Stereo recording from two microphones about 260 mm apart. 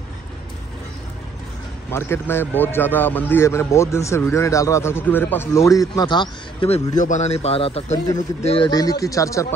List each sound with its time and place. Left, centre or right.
1.9 s a man's voice: centre